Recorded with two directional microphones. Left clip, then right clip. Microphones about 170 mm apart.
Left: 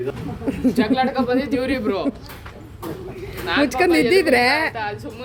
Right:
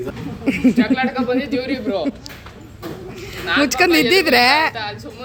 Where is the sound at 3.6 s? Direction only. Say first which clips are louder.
Right 2 dB; centre (ahead or behind).